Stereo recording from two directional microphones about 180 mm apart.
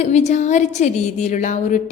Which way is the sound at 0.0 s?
40° left (ahead or behind).